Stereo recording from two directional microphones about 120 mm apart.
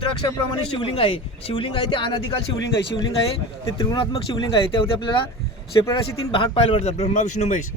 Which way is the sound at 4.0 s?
45° left (ahead or behind).